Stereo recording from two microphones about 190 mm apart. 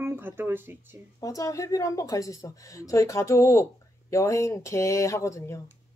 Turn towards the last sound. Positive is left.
turn(degrees=15)  # may be behind; listen again after turning